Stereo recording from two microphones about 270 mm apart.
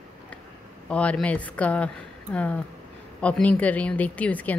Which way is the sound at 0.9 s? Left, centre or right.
Centre.